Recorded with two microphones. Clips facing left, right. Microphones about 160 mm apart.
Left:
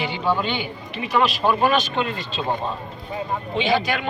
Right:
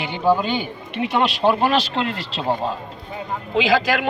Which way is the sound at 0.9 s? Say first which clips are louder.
Right 1 dB; 70° right (ahead or behind).